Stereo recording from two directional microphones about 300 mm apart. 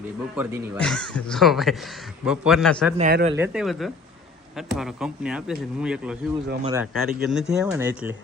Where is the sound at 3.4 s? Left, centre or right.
Centre.